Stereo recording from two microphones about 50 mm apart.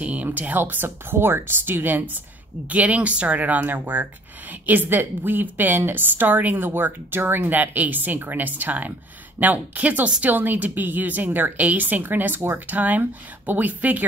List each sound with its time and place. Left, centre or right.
0.0 s speech: right
2.7 s speech: right